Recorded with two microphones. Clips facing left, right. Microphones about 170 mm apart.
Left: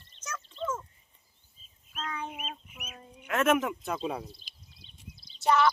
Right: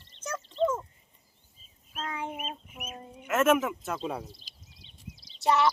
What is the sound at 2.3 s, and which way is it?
Chicken, 45° right (ahead or behind).